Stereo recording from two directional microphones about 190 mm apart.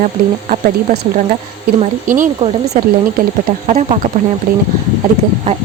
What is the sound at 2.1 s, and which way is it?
Speech, 45° right (ahead or behind).